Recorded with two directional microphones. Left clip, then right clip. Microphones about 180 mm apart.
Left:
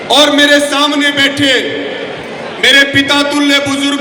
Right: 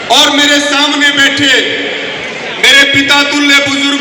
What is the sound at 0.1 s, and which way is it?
A man's voice, 75° left (ahead or behind).